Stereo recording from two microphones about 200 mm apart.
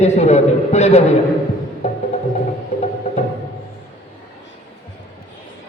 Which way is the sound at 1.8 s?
35° left (ahead or behind).